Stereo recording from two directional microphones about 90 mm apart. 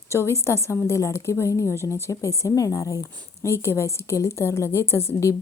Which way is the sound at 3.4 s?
30° left (ahead or behind).